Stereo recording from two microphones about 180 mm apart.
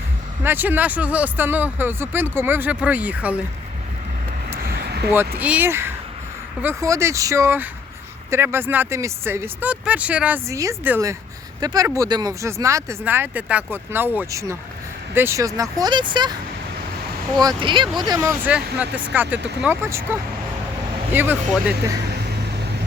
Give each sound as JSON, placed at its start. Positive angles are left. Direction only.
{"t": 0.4, "sound": "speech", "side_deg": -10}
{"t": 4.5, "sound": "a sound", "side_deg": -60}
{"t": 5.4, "sound": "speech", "side_deg": -10}
{"t": 17.4, "sound": "speech", "side_deg": -25}
{"t": 21.1, "sound": "speech", "side_deg": -10}